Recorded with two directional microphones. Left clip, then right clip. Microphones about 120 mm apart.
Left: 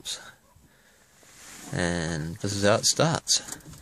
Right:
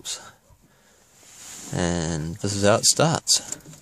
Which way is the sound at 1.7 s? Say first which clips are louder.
Right 2 dB; 25° right (ahead or behind).